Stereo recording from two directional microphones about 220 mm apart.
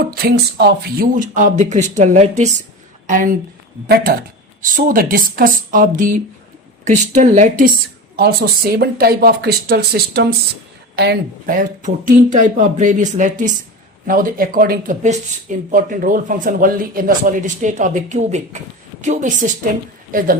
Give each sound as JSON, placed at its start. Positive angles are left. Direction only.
{"t": 0.1, "sound": "speech", "side_deg": -45}
{"t": 8.1, "sound": "speech", "side_deg": -45}